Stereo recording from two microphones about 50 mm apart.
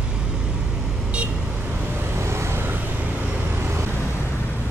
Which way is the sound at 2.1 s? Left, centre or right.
Right.